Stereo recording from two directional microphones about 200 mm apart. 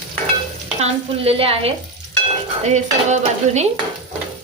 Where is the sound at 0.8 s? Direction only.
30° right (ahead or behind).